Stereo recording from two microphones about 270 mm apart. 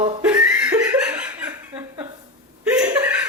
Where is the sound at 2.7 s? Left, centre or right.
Centre.